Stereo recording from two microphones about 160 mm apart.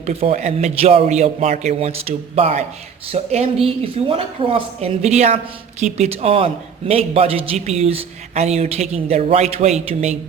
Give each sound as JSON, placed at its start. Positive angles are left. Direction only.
{"t": 0.0, "sound": "a man's voice", "side_deg": -45}